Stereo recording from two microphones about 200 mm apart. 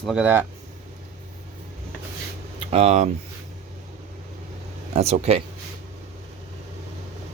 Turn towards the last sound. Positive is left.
turn(degrees=-30)  # may be behind; listen again after turning